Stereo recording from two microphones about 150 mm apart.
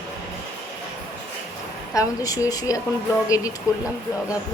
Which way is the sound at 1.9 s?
25° left (ahead or behind).